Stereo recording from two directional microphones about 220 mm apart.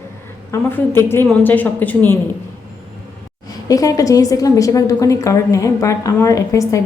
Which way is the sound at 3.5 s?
15° left (ahead or behind).